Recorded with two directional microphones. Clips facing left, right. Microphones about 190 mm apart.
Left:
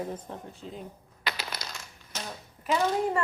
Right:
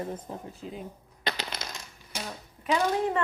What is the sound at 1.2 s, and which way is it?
Coin, 25° right (ahead or behind).